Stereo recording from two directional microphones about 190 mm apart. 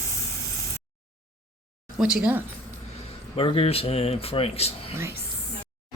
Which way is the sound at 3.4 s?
30° left (ahead or behind).